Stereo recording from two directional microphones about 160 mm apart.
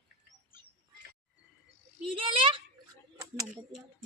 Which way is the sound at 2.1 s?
35° right (ahead or behind).